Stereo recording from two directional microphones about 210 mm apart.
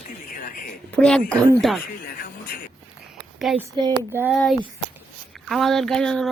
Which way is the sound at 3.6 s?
20° right (ahead or behind).